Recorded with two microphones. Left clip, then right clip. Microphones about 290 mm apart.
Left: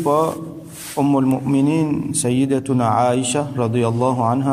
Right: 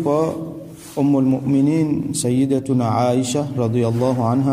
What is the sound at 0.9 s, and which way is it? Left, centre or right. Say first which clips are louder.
Speech: even; left.